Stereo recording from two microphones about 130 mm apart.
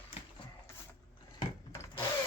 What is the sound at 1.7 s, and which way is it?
Drill, 20° left (ahead or behind).